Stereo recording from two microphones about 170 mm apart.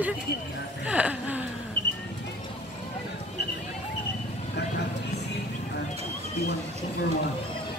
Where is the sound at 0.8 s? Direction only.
5° right (ahead or behind).